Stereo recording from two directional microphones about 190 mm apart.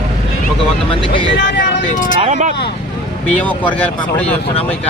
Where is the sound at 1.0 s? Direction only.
25° left (ahead or behind).